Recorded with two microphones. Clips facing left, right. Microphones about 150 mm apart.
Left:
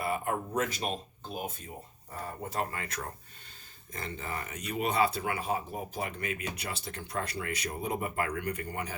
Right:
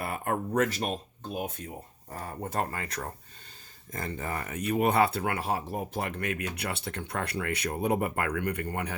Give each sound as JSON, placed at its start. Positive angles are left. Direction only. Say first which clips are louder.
{"t": 0.0, "sound": "a sound", "louder": "right 1 dB", "side_deg": -55}
{"t": 2.0, "sound": "speech", "louder": "right 2 dB", "side_deg": -45}
{"t": 3.9, "sound": "speech", "louder": "right 4 dB", "side_deg": -45}